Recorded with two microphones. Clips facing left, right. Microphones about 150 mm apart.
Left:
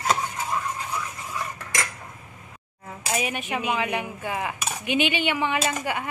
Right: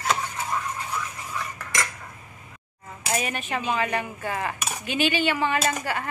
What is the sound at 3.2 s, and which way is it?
Speech, 10° left (ahead or behind).